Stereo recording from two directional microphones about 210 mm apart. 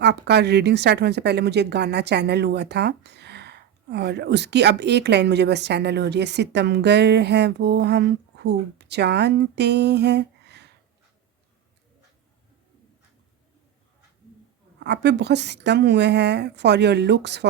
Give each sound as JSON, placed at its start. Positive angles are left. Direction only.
{"t": 0.0, "sound": "a woman's voice", "side_deg": -55}
{"t": 14.8, "sound": "a woman's voice", "side_deg": -55}